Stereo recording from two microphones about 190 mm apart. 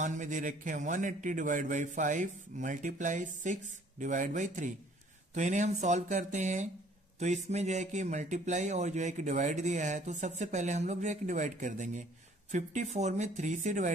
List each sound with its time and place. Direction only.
0.0 s speech: 40° right (ahead or behind)